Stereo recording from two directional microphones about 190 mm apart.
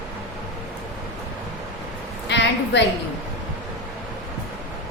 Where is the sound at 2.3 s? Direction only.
70° left (ahead or behind).